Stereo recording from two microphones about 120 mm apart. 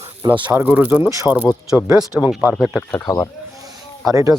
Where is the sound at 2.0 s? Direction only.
35° left (ahead or behind).